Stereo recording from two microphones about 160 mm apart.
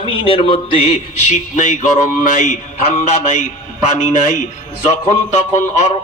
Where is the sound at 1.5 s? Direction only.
55° left (ahead or behind).